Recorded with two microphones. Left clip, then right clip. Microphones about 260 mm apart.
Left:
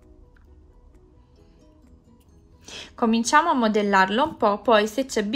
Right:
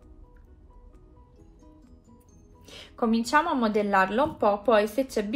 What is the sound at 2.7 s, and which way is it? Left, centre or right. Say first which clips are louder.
A woman's voice: left 4 dB; left.